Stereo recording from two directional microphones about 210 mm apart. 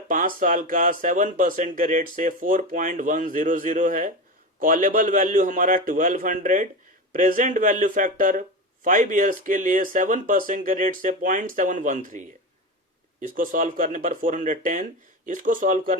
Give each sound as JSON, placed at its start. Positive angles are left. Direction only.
{"t": 0.1, "sound": "speech", "side_deg": -40}
{"t": 13.2, "sound": "speech", "side_deg": -40}